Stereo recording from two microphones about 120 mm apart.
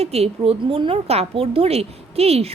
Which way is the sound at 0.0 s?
60° right (ahead or behind).